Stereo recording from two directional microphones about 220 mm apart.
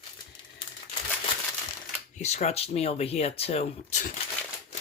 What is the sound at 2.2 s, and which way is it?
Speech, 30° left (ahead or behind).